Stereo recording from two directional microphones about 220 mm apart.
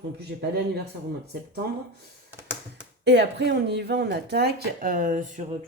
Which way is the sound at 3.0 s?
50° right (ahead or behind).